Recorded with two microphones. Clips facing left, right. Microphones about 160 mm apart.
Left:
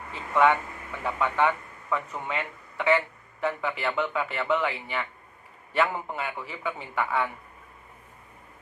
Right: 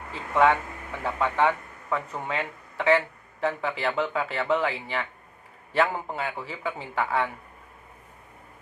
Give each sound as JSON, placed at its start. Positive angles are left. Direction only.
{"t": 0.1, "sound": "speech", "side_deg": -30}